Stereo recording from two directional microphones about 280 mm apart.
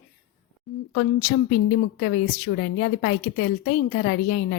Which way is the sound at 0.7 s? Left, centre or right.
Centre.